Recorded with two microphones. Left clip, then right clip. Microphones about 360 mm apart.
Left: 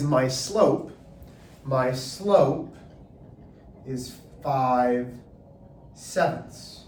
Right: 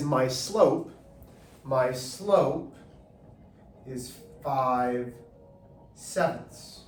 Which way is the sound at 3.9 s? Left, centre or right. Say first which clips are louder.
Left 4 dB; centre.